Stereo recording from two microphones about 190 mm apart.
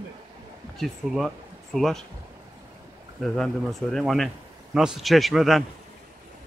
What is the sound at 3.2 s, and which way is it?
Speech, centre (ahead or behind).